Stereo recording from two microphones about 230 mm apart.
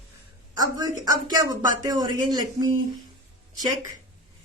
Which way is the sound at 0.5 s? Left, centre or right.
Centre.